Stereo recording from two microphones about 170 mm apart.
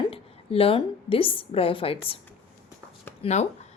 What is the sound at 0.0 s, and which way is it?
A woman's voice, 35° left (ahead or behind).